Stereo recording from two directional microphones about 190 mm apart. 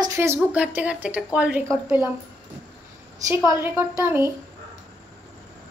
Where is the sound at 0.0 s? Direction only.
15° right (ahead or behind).